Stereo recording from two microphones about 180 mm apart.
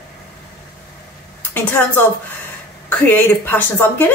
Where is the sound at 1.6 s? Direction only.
10° left (ahead or behind).